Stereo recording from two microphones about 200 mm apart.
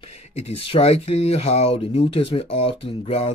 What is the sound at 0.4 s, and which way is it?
Speech, 30° left (ahead or behind).